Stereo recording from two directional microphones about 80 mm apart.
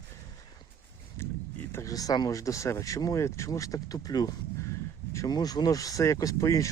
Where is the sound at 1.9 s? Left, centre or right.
Left.